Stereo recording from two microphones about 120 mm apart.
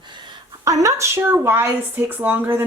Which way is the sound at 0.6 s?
25° right (ahead or behind).